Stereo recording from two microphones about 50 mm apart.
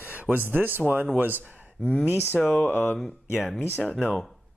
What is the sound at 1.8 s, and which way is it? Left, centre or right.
Speech, centre.